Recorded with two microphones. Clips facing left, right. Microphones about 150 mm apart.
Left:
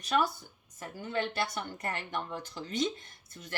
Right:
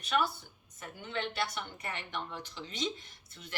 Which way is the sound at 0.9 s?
45° left (ahead or behind).